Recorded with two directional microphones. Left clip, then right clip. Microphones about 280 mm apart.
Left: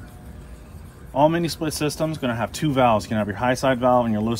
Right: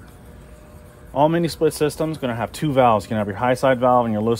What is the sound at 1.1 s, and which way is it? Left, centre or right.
Speech, right.